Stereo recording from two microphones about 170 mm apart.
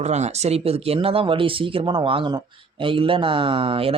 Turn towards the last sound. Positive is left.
turn(degrees=-35)  # may be behind; listen again after turning